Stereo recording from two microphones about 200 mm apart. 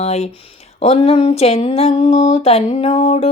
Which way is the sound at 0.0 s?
30° left (ahead or behind).